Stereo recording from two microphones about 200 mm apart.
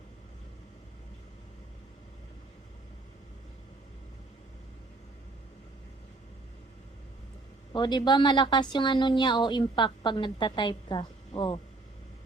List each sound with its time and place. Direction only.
7.7 s a woman's voice: 20° left (ahead or behind)